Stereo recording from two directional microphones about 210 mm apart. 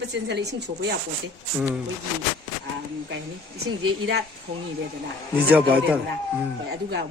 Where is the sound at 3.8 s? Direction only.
55° right (ahead or behind).